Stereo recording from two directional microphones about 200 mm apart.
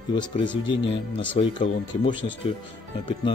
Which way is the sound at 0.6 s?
25° left (ahead or behind).